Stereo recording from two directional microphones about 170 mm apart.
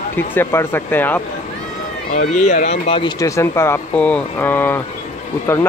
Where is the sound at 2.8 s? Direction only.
30° left (ahead or behind).